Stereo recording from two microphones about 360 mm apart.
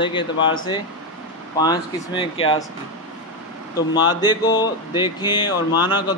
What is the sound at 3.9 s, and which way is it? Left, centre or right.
Speech, centre.